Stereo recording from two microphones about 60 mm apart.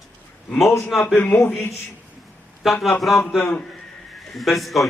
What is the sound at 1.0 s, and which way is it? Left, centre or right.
Speech, left.